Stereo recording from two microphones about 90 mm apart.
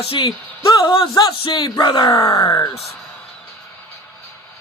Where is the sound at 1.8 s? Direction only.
60° left (ahead or behind).